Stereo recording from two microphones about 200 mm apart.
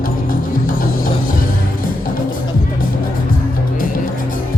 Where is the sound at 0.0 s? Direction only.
45° left (ahead or behind).